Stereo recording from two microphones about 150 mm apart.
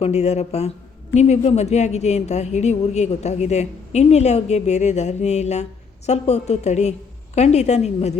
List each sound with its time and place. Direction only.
0.0 s a woman's voice: 45° left (ahead or behind)